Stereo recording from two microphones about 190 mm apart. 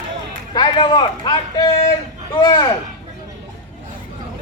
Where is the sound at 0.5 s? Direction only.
25° left (ahead or behind).